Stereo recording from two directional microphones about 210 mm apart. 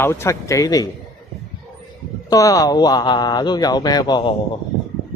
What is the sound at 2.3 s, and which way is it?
Speech, 15° left (ahead or behind).